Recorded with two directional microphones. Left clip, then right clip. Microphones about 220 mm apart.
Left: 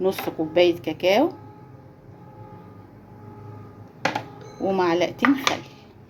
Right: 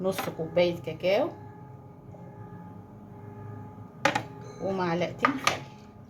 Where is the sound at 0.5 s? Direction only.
40° left (ahead or behind).